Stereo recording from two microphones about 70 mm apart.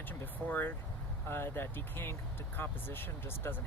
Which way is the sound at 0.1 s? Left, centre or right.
Left.